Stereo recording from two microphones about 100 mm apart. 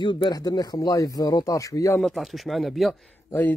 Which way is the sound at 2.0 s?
Centre (ahead or behind).